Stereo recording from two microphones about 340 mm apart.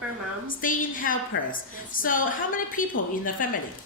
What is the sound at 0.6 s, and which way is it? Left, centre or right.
A woman's voice, left.